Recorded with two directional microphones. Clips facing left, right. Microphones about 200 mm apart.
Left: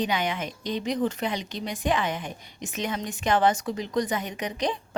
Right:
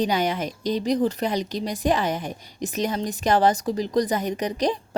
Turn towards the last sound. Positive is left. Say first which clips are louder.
# right 5 dB
turn(degrees=-40)  # may be behind; listen again after turning